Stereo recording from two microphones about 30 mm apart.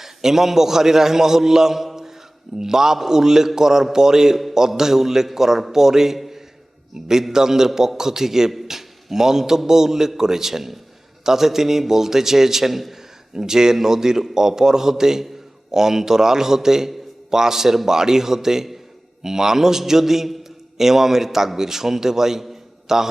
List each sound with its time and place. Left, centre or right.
0.0 s a man's voice: centre
13.3 s a man's voice: centre